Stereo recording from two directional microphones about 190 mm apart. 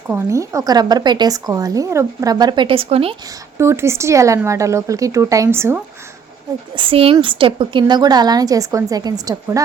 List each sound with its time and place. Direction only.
0.1 s speech: 15° right (ahead or behind)
3.6 s speech: 15° right (ahead or behind)
6.7 s speech: 30° right (ahead or behind)